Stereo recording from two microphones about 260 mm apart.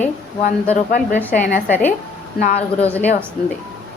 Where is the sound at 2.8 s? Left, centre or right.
Centre.